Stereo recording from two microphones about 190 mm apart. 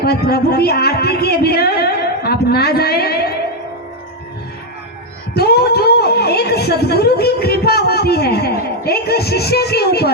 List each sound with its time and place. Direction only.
0.0 s speech: 55° left (ahead or behind)
5.3 s a woman's voice: 55° left (ahead or behind)